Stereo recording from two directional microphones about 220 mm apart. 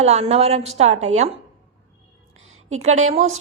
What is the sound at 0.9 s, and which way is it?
Speech, 65° right (ahead or behind).